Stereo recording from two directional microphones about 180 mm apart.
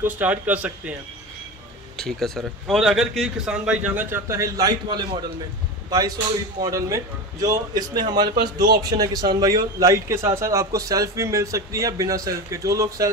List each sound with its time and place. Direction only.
0.0 s a man's voice: 10° right (ahead or behind)
2.0 s a man's voice: 5° left (ahead or behind); by 13.1 s 20° right (ahead or behind)